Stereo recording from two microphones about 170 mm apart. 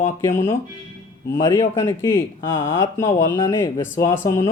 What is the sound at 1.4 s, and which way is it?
Speech, 25° left (ahead or behind).